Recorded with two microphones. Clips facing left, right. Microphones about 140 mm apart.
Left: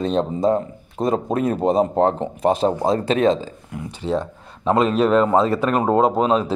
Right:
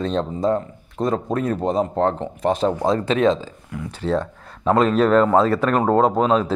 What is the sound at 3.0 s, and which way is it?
Speech, 45° left (ahead or behind).